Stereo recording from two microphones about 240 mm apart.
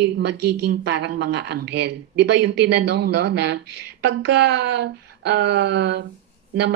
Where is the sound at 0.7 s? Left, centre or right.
Right.